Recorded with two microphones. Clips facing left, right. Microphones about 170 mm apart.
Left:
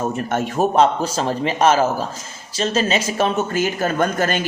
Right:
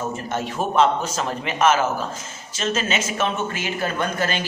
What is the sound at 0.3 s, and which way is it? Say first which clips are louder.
Speech: left 6 dB; 50° left (ahead or behind).